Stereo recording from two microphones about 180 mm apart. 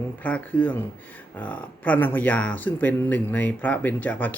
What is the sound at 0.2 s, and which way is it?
Speech, 10° left (ahead or behind).